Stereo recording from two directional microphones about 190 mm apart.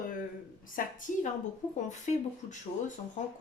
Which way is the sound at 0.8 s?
45° left (ahead or behind).